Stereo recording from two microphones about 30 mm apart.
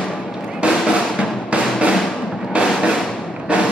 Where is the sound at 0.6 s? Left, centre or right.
Right.